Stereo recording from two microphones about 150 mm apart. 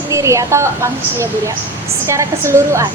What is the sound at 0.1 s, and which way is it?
A woman's voice, 20° right (ahead or behind).